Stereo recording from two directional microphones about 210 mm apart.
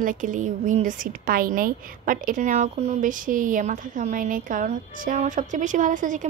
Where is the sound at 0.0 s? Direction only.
40° right (ahead or behind).